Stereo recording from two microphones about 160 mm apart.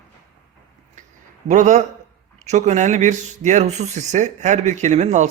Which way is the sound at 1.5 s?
50° right (ahead or behind).